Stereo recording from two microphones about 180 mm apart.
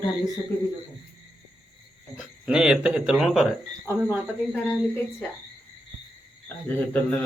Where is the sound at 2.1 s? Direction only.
5° right (ahead or behind).